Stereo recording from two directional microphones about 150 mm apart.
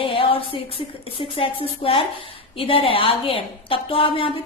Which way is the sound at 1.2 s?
40° left (ahead or behind).